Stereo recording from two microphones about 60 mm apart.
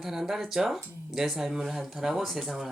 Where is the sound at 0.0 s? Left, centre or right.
Centre.